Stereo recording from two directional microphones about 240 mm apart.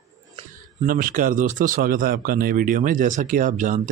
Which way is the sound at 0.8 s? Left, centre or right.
Right.